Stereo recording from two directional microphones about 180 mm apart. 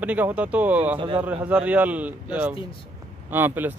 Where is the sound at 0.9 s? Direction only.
30° right (ahead or behind).